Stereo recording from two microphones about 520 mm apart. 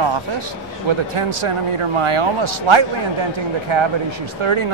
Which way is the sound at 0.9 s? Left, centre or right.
Right.